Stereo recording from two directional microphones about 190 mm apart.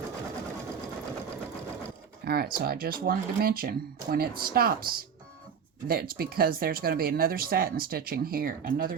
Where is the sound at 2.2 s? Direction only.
50° right (ahead or behind).